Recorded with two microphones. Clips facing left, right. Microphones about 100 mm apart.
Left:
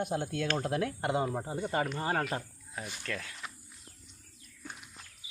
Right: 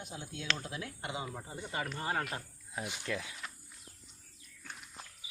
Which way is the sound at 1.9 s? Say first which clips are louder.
Left 4 dB; 30° left (ahead or behind).